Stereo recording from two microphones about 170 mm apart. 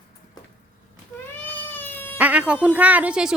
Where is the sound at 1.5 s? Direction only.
10° left (ahead or behind).